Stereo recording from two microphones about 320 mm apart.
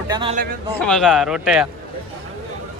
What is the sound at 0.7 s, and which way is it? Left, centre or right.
Speech, centre.